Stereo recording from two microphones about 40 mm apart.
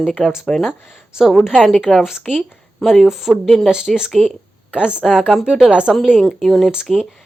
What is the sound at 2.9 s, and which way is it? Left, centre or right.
Speech, centre.